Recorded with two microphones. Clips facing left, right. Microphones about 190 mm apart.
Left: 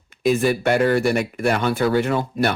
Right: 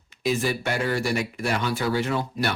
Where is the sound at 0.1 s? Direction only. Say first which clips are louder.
Left 6 dB; 55° left (ahead or behind).